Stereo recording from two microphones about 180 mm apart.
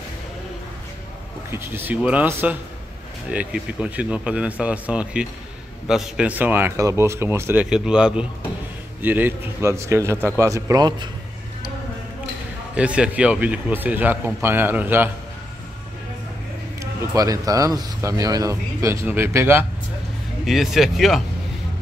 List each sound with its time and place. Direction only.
1.5 s speech: 10° right (ahead or behind)
12.7 s speech: 5° right (ahead or behind)
16.8 s speech: 20° right (ahead or behind)
20.4 s speech: centre (ahead or behind)